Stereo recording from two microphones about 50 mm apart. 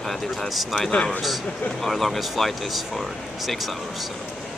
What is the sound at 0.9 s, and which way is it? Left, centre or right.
Speech, left.